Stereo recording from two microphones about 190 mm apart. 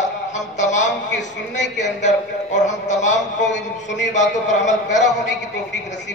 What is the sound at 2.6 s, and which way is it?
Speech, 40° left (ahead or behind).